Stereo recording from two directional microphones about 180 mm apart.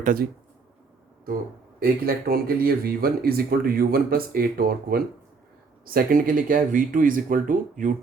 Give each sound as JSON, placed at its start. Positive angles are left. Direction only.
{"t": 0.0, "sound": "speech", "side_deg": -55}
{"t": 1.8, "sound": "speech", "side_deg": -55}